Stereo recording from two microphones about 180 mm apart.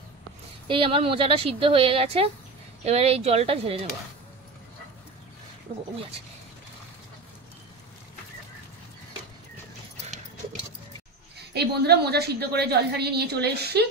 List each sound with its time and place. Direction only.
0.7 s speech: 30° right (ahead or behind)
11.3 s a woman's voice: 65° right (ahead or behind)